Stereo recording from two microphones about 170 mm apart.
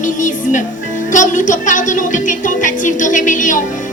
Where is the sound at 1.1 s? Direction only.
50° left (ahead or behind).